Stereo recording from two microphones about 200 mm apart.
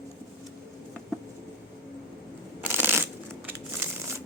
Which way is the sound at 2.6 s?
10° right (ahead or behind).